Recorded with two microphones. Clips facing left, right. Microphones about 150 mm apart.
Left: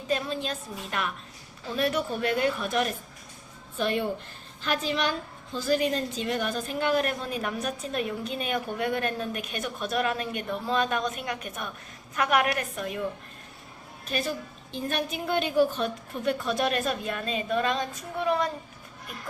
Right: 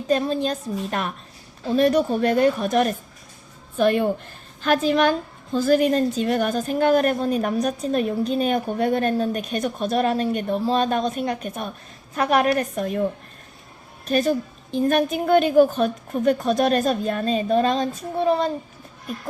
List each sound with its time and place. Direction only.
0.1 s a woman's voice: 40° right (ahead or behind)
3.8 s a woman's voice: 55° right (ahead or behind)
14.1 s a woman's voice: 45° right (ahead or behind); by 18.5 s 30° right (ahead or behind)